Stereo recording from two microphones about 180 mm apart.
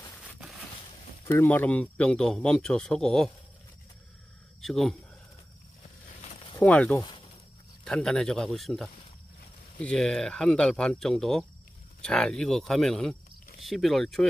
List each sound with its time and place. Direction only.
1.2 s a man's voice: 10° left (ahead or behind)
4.6 s speech: centre (ahead or behind)
6.6 s speech: 10° left (ahead or behind)
7.0 s snake: 25° left (ahead or behind)
7.8 s a man's voice: 5° left (ahead or behind)